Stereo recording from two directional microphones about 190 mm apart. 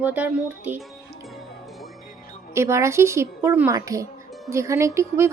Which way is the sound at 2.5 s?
15° right (ahead or behind).